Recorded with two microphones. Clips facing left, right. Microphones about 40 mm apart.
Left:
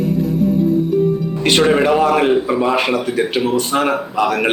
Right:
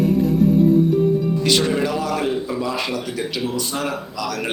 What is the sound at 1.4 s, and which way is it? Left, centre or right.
A man's voice, left.